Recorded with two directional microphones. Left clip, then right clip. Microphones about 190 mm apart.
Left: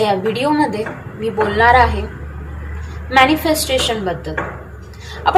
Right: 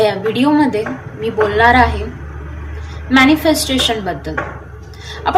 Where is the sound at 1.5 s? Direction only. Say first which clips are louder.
Even; 15° right (ahead or behind).